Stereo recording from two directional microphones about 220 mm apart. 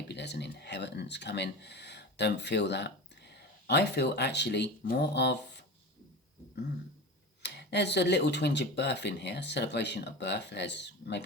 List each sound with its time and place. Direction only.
0.1 s speech: 50° left (ahead or behind)
7.4 s speech: 50° left (ahead or behind)